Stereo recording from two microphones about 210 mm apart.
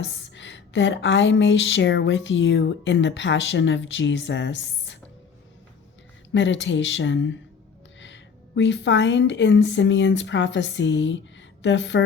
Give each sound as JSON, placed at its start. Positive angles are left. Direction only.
{"t": 0.0, "sound": "speech", "side_deg": 60}
{"t": 6.3, "sound": "a woman's voice", "side_deg": 60}